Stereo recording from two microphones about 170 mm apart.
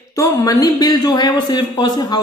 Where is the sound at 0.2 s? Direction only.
20° left (ahead or behind).